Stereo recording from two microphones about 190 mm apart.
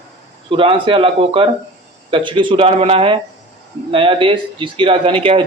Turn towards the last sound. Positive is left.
turn(degrees=-30)  # may be behind; listen again after turning